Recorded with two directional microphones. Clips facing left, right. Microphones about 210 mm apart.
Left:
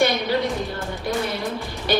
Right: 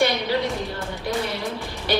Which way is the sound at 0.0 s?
50° left (ahead or behind).